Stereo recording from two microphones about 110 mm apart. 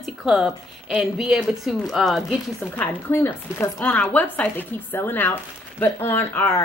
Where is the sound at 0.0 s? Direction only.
5° right (ahead or behind).